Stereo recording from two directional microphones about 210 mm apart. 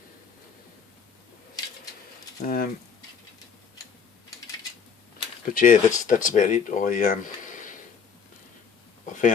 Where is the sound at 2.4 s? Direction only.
40° left (ahead or behind).